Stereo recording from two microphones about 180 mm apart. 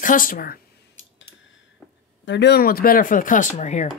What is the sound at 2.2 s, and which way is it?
Speech, 70° left (ahead or behind).